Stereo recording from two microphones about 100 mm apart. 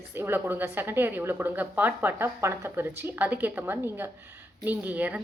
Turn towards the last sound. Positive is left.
turn(degrees=-15)  # may be behind; listen again after turning